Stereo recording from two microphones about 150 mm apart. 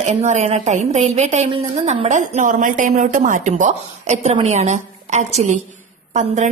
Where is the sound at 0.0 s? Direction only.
50° right (ahead or behind).